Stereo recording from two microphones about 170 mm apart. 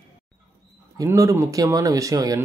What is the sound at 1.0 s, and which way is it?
Speech, 20° right (ahead or behind).